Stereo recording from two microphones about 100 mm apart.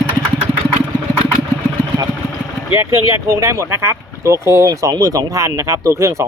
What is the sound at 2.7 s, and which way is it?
Speech, 30° right (ahead or behind).